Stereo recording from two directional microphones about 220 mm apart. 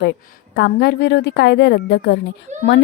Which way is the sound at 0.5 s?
50° left (ahead or behind).